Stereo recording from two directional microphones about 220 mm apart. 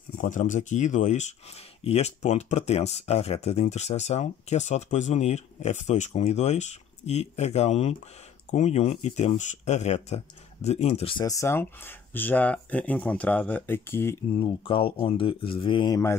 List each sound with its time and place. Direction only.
0.2 s speech: 35° left (ahead or behind); by 14.1 s 10° left (ahead or behind)
14.3 s speech: 20° left (ahead or behind)